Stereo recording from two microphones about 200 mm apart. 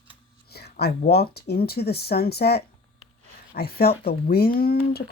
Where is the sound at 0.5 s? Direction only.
55° left (ahead or behind).